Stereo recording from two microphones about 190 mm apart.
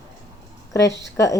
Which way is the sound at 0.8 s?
65° left (ahead or behind).